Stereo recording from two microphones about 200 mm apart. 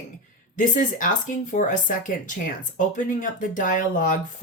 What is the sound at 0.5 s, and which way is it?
Speech, 40° left (ahead or behind).